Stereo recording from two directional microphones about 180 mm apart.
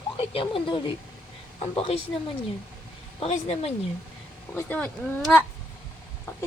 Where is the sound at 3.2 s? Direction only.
35° left (ahead or behind).